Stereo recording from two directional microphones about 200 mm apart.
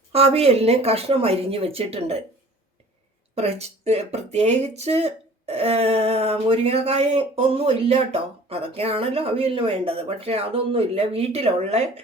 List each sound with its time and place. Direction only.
0.1 s speech: 30° right (ahead or behind)
3.3 s speech: 30° right (ahead or behind)